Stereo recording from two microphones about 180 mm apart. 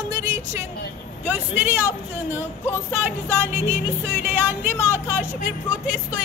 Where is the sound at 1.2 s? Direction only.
10° right (ahead or behind).